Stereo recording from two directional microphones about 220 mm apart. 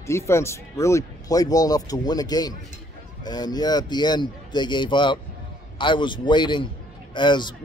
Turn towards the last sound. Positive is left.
turn(degrees=20)  # may be behind; listen again after turning